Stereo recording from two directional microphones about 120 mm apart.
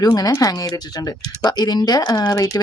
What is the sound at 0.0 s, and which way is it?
Speech, 30° left (ahead or behind).